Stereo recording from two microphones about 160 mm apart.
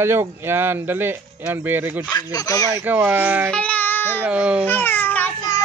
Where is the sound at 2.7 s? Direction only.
15° right (ahead or behind).